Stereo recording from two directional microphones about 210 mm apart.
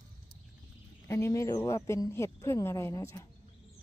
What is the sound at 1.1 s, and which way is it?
Speech, 15° left (ahead or behind).